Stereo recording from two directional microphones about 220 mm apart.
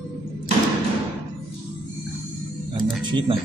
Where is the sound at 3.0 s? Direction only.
20° right (ahead or behind).